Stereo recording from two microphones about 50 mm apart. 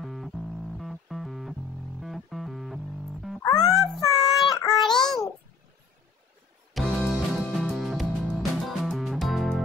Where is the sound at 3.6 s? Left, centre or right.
Centre.